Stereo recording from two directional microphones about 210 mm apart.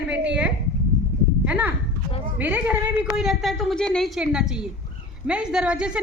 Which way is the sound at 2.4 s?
10° right (ahead or behind).